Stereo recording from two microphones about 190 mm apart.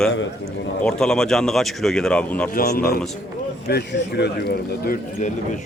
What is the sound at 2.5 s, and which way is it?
A man's voice, 55° left (ahead or behind).